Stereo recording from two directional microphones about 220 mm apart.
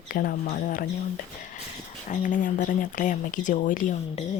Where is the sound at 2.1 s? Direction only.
35° left (ahead or behind).